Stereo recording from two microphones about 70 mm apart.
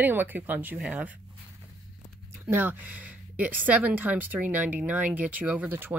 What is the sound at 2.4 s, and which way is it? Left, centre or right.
Speech, right.